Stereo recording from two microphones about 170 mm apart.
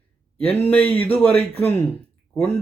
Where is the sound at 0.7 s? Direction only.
10° left (ahead or behind).